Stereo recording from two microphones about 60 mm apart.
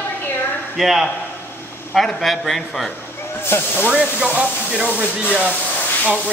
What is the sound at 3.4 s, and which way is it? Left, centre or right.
Speech, left.